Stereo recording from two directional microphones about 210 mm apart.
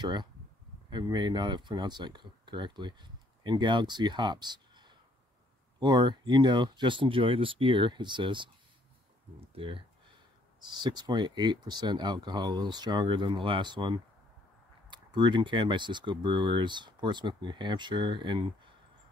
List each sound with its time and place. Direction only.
0.0 s speech: 20° right (ahead or behind)
9.6 s a sound: 25° right (ahead or behind)
10.6 s speech: 20° right (ahead or behind)